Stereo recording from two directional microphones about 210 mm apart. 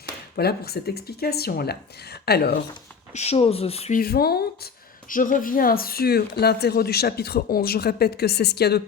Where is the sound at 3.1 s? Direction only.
30° left (ahead or behind).